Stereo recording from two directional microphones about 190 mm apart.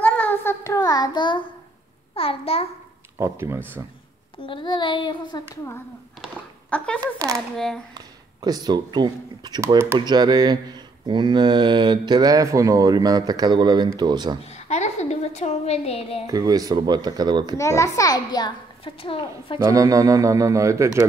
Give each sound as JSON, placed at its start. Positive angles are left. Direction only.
{"t": 0.0, "sound": "child singing", "side_deg": 10}
{"t": 2.1, "sound": "a child's voice", "side_deg": 30}
{"t": 3.2, "sound": "speech", "side_deg": -10}
{"t": 4.5, "sound": "child singing", "side_deg": 25}
{"t": 6.2, "sound": "a sound", "side_deg": 5}
{"t": 7.2, "sound": "speech", "side_deg": -15}
{"t": 7.5, "sound": "speech", "side_deg": 5}
{"t": 7.9, "sound": "speech", "side_deg": -20}
{"t": 14.4, "sound": "a woman's voice", "side_deg": 35}
{"t": 16.3, "sound": "speech", "side_deg": -20}
{"t": 17.6, "sound": "a child's voice", "side_deg": 15}
{"t": 18.9, "sound": "child singing", "side_deg": 30}
{"t": 19.6, "sound": "speech", "side_deg": -20}